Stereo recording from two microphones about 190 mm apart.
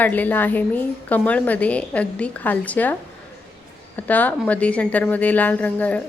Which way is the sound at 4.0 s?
10° left (ahead or behind).